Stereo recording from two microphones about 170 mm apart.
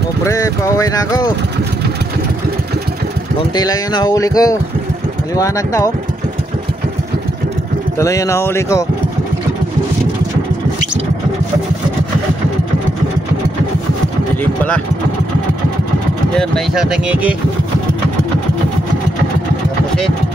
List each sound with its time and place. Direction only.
0.2 s speech: 20° left (ahead or behind)
3.5 s speech: 25° left (ahead or behind)
8.0 s speech: 20° left (ahead or behind)
14.4 s vehicle: 10° left (ahead or behind)
16.3 s speech: centre (ahead or behind)